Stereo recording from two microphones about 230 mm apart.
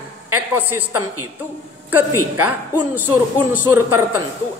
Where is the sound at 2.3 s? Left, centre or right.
Centre.